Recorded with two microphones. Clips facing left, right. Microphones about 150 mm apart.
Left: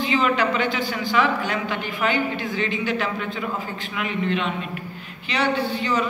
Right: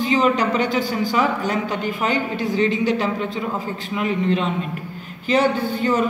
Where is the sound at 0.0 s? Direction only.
40° right (ahead or behind).